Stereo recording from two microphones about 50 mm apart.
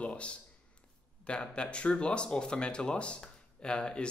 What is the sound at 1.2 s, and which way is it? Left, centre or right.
Speech, centre.